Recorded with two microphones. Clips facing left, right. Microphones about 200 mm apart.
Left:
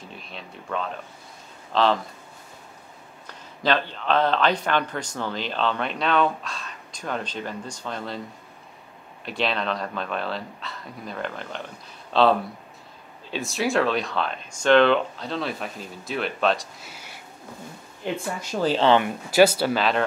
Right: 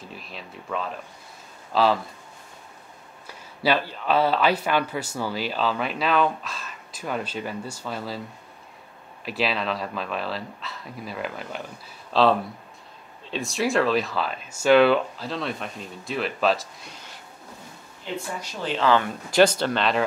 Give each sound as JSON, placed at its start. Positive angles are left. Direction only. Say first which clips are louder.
{"t": 0.0, "sound": "speech", "louder": "even", "side_deg": 0}
{"t": 3.3, "sound": "speech", "louder": "even", "side_deg": -10}
{"t": 9.2, "sound": "speech", "louder": "even", "side_deg": -5}
{"t": 18.4, "sound": "speech", "louder": "left 7 dB", "side_deg": 45}
{"t": 18.9, "sound": "speech", "louder": "even", "side_deg": 15}
{"t": 19.3, "sound": "speech", "louder": "left 1 dB", "side_deg": 5}